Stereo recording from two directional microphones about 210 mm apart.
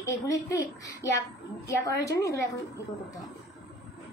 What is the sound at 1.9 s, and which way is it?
Speech, 15° left (ahead or behind).